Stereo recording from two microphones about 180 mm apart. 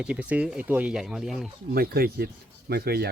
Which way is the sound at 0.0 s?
5° right (ahead or behind).